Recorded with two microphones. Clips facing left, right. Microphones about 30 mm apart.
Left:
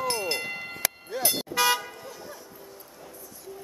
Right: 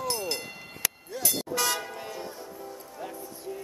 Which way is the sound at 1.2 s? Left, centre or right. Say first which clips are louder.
Left 4 dB; centre.